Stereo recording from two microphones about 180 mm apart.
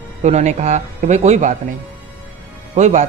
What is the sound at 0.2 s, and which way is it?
Speech, 40° right (ahead or behind).